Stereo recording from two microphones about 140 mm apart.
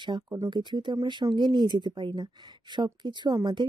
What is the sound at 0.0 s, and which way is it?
Speech, 30° right (ahead or behind).